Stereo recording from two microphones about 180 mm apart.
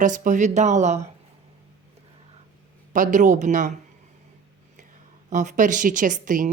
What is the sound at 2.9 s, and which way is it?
Speech, 45° right (ahead or behind).